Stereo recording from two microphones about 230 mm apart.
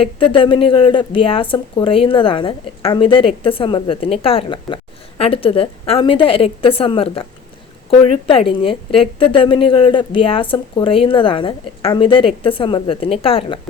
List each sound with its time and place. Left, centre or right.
0.0 s a woman's voice: left